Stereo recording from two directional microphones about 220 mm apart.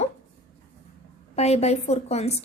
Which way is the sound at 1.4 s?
30° left (ahead or behind).